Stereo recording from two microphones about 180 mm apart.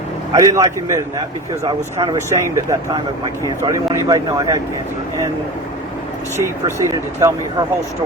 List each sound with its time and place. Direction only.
0.3 s speech: 20° right (ahead or behind)
6.4 s speech: 15° right (ahead or behind)